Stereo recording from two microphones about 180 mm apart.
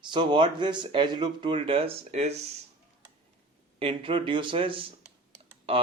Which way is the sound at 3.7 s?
30° right (ahead or behind).